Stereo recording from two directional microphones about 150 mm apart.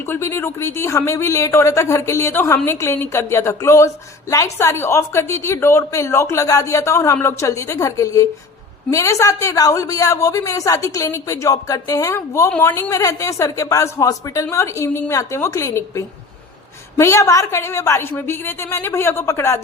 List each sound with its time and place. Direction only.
0.0 s a woman's voice: 15° left (ahead or behind)